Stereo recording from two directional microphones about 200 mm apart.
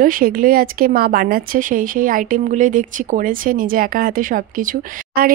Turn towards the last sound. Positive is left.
turn(degrees=-45)  # may be behind; listen again after turning